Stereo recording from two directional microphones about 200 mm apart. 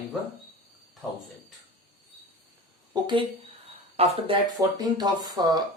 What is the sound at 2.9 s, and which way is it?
Speech, 20° right (ahead or behind).